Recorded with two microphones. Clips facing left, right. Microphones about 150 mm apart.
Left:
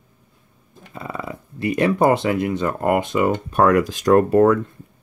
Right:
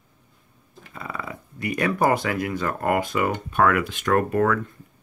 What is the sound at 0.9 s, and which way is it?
Speech, 25° left (ahead or behind).